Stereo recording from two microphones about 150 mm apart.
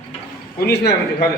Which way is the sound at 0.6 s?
90° left.